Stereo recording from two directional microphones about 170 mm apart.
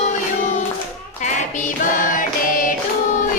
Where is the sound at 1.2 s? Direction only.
45° left (ahead or behind).